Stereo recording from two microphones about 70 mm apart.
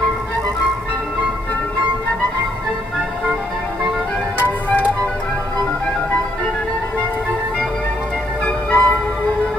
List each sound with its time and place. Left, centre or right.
8.5 s music: centre